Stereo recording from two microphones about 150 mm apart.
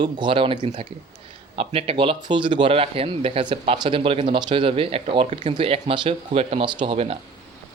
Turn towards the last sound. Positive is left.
turn(degrees=-40)  # may be behind; listen again after turning